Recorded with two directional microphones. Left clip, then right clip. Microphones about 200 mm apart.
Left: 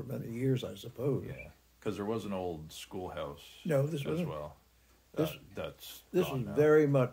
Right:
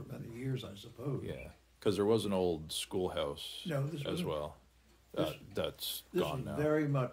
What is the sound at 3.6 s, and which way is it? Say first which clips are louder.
Speech: left 9 dB; 65° left (ahead or behind).